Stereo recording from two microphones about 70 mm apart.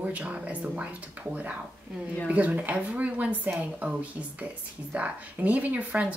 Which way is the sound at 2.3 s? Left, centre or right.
Right.